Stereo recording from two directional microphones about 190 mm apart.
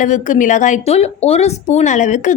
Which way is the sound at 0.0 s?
40° left (ahead or behind).